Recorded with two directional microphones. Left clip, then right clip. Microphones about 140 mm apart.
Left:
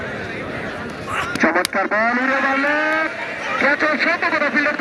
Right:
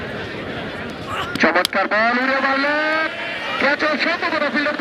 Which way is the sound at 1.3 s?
20° right (ahead or behind).